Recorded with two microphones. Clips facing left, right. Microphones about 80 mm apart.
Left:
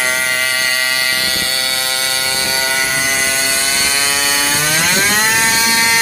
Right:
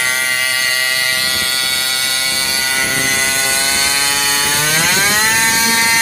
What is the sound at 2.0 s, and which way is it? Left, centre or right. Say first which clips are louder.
Electric shaver: left 1 dB; left.